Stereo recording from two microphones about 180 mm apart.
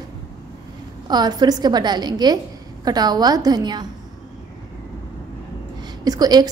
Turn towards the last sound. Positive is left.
turn(degrees=-20)  # may be behind; listen again after turning